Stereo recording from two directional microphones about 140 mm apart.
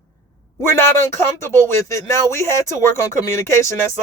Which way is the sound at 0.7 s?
20° left (ahead or behind).